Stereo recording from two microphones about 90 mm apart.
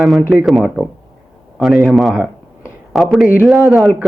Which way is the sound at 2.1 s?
15° right (ahead or behind).